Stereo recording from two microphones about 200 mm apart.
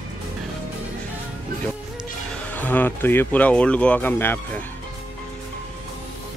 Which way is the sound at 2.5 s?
10° left (ahead or behind).